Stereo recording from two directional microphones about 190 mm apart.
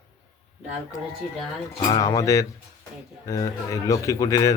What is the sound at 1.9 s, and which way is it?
Speech, 20° left (ahead or behind).